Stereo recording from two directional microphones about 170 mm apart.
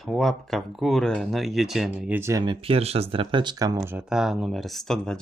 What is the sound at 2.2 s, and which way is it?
Speech, 20° right (ahead or behind).